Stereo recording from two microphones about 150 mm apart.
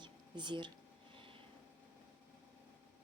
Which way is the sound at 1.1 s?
35° right (ahead or behind).